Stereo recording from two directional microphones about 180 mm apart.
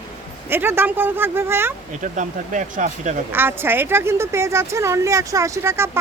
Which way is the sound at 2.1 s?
45° right (ahead or behind).